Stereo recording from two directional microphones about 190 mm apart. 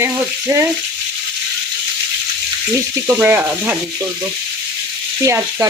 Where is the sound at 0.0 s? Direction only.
15° right (ahead or behind).